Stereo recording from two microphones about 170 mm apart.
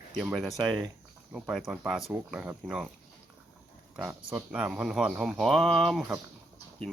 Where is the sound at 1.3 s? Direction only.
Centre (ahead or behind).